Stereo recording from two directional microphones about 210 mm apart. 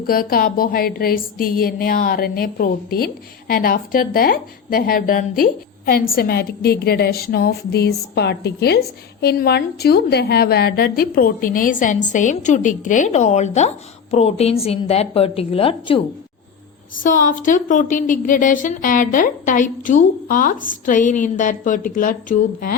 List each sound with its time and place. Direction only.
0.1 s a woman's voice: 45° left (ahead or behind); by 16.0 s 25° left (ahead or behind)
17.0 s a woman's voice: 40° left (ahead or behind)